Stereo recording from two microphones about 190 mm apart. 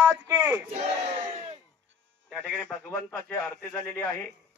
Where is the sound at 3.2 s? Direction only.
10° left (ahead or behind).